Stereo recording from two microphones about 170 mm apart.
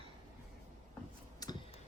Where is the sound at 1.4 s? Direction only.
20° left (ahead or behind).